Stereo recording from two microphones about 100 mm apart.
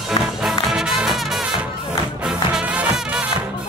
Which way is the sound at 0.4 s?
5° right (ahead or behind).